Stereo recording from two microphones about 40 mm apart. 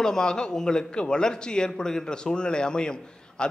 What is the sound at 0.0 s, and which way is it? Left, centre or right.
A man's voice, centre.